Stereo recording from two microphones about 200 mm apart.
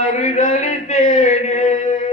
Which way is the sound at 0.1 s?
35° left (ahead or behind).